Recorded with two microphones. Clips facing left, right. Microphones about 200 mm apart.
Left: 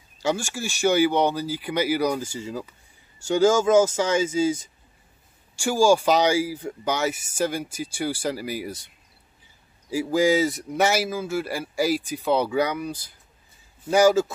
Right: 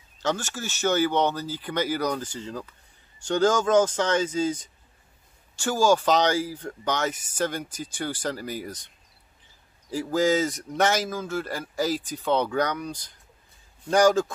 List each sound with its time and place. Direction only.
0.2 s speech: 10° left (ahead or behind)